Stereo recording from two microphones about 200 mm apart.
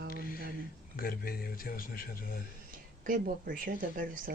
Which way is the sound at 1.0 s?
50° left (ahead or behind).